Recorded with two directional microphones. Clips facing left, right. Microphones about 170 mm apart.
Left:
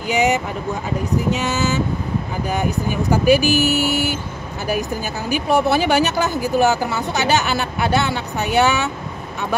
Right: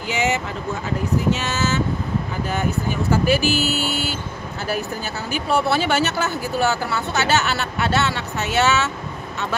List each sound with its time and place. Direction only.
0.1 s speech: 15° left (ahead or behind)
5.3 s speech: 15° left (ahead or behind)